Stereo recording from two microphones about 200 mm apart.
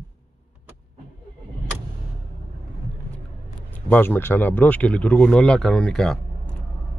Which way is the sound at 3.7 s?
10° left (ahead or behind).